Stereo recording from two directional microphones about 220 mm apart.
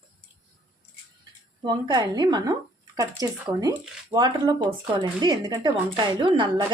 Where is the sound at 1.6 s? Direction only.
20° right (ahead or behind).